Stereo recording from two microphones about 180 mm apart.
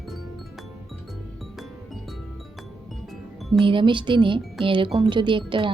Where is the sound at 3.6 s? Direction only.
25° right (ahead or behind).